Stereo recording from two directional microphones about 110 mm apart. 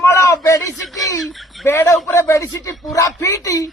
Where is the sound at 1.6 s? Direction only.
20° left (ahead or behind).